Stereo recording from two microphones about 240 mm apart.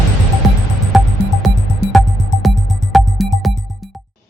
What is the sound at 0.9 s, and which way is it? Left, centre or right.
Music, centre.